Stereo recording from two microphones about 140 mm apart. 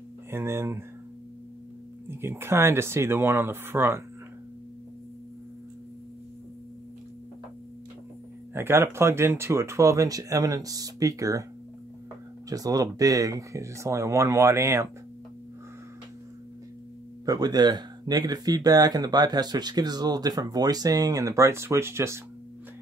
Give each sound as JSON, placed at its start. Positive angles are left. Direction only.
{"t": 0.3, "sound": "speech", "side_deg": -20}
{"t": 2.0, "sound": "speech", "side_deg": -15}
{"t": 8.5, "sound": "speech", "side_deg": -20}
{"t": 12.4, "sound": "speech", "side_deg": -25}
{"t": 17.3, "sound": "speech", "side_deg": -30}